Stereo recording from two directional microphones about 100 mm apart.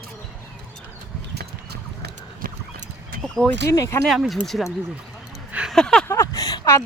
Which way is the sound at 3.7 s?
35° left (ahead or behind).